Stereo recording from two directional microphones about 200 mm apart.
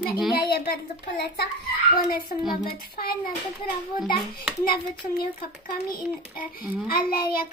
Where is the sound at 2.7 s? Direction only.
50° left (ahead or behind).